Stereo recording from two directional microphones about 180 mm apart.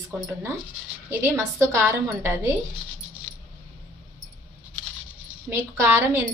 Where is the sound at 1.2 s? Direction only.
15° right (ahead or behind).